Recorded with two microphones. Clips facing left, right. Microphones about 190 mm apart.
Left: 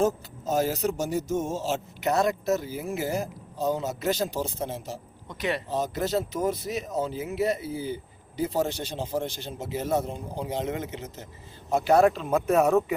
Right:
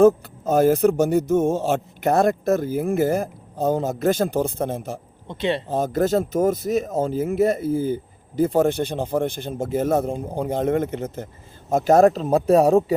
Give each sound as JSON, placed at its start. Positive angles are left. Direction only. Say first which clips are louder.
{"t": 0.0, "sound": "speech", "louder": "right 10 dB", "side_deg": -55}
{"t": 5.3, "sound": "speech", "louder": "right 6 dB", "side_deg": -25}
{"t": 5.6, "sound": "speech", "louder": "right 7 dB", "side_deg": -50}